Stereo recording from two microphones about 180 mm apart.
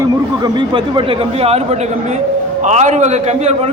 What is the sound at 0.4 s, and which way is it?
A man's voice, 25° right (ahead or behind).